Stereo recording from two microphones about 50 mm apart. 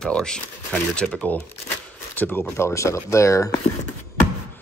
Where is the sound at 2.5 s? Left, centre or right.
Left.